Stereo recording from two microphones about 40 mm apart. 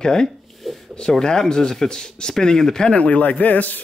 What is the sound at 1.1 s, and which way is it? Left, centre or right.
Speech, centre.